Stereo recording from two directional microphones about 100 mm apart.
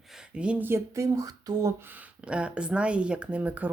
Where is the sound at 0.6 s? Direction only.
25° right (ahead or behind).